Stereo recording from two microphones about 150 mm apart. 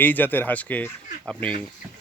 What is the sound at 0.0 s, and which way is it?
Speech, 10° left (ahead or behind).